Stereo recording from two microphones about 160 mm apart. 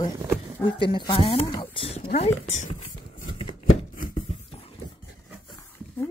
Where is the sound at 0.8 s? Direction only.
30° left (ahead or behind).